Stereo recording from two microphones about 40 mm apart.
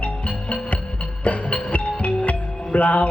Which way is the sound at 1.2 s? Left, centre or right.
Left.